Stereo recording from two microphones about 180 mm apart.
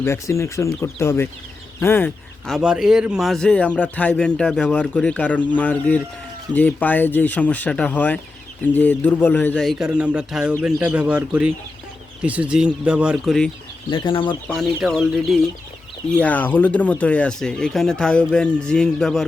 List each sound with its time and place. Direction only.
0.0 s a man's voice: 15° left (ahead or behind)
2.5 s a man's voice: 5° right (ahead or behind)
13.9 s speech: 30° left (ahead or behind)
14.4 s speech: centre (ahead or behind)